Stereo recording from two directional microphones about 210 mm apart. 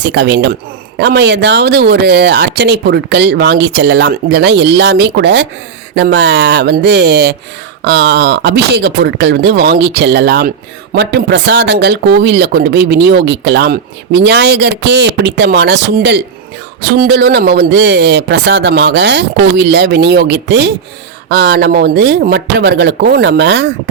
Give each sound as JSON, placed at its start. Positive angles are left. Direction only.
{"t": 0.0, "sound": "speech", "side_deg": -55}